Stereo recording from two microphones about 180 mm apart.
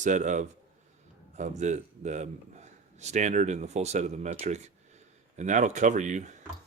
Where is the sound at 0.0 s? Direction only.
45° right (ahead or behind).